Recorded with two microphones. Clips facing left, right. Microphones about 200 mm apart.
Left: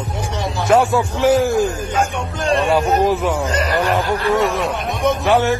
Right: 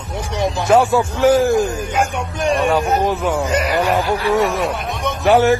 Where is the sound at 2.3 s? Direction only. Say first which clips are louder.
Right 1 dB; 15° right (ahead or behind).